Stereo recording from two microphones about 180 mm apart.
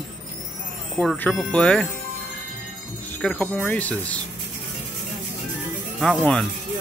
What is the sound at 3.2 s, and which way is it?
Speech, 5° left (ahead or behind).